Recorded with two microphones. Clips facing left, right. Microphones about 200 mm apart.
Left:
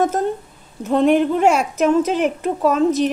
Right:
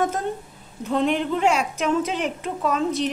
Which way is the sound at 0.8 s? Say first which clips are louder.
Left 7 dB; 45° left (ahead or behind).